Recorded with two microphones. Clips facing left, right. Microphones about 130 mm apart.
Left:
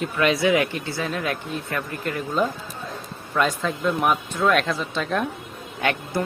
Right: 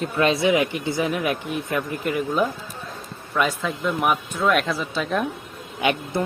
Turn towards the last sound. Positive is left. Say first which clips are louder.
# right 2 dB
turn(degrees=-15)  # may be behind; listen again after turning